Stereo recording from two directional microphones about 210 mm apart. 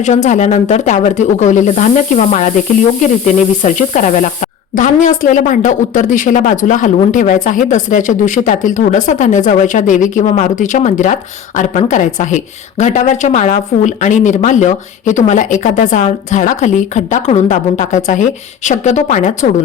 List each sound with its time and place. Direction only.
0.0 s speech: 35° left (ahead or behind)